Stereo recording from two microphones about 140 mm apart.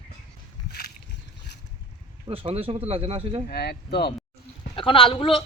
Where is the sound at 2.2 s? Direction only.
45° right (ahead or behind).